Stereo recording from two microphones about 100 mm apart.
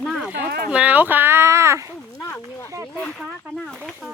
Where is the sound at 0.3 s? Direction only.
15° right (ahead or behind).